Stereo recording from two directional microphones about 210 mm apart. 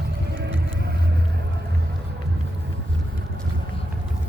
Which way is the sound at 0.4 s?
60° right (ahead or behind).